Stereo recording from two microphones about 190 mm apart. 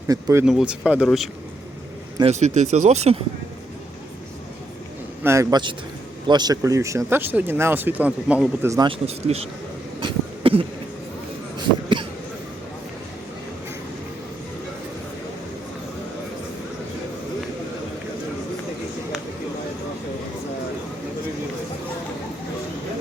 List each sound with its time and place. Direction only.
0.1 s speech: 20° right (ahead or behind)
0.4 s speech: 5° right (ahead or behind)
2.2 s speech: 35° right (ahead or behind)
5.2 s speech: 15° right (ahead or behind)
8.9 s speech: 35° right (ahead or behind)
10.0 s a sound: 25° right (ahead or behind)